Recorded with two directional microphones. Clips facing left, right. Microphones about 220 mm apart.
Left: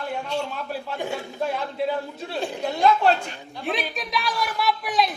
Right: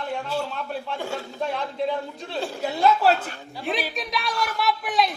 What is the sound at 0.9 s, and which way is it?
Speech, 15° left (ahead or behind).